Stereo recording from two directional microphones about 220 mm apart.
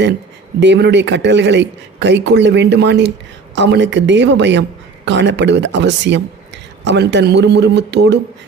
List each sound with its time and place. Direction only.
0.6 s speech: 50° right (ahead or behind)